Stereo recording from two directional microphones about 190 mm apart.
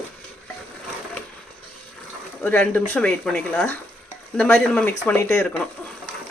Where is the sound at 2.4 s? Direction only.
10° left (ahead or behind).